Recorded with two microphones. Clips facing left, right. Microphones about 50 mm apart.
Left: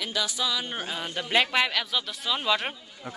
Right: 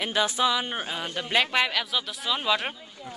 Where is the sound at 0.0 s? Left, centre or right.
Right; by 1.1 s centre.